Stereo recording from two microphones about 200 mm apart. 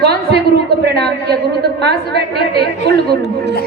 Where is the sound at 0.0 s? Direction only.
55° right (ahead or behind).